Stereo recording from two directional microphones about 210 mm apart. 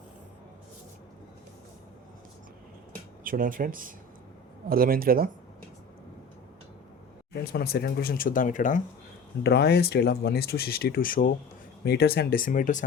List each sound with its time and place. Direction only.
3.2 s speech: 40° right (ahead or behind)
7.4 s speech: 50° left (ahead or behind)
9.4 s speech: 50° left (ahead or behind)